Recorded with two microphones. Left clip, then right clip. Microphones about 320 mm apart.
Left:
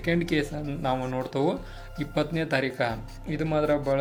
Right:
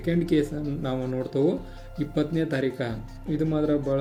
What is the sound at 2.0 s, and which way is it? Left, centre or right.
Speech, centre.